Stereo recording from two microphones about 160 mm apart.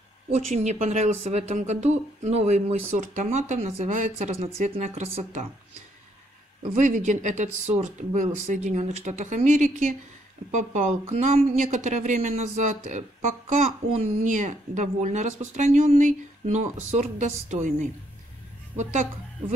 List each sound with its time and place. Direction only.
0.3 s a woman's voice: 45° right (ahead or behind)
6.8 s a woman's voice: 50° right (ahead or behind)